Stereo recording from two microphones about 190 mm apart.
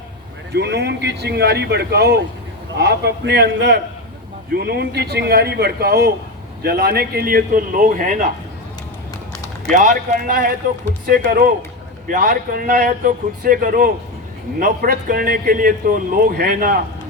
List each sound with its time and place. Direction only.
0.5 s a man's voice: 60° right (ahead or behind); by 8.3 s 45° right (ahead or behind)
9.7 s a man's voice: 40° right (ahead or behind)